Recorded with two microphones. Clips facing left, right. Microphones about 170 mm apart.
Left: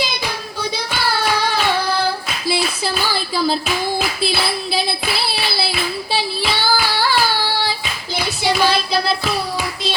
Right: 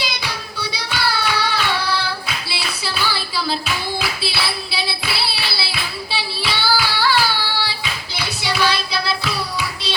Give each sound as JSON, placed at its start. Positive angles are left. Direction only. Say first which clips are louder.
{"t": 0.7, "sound": "child singing", "louder": "left 1 dB", "side_deg": 45}
{"t": 4.2, "sound": "singing", "louder": "left 5 dB", "side_deg": 45}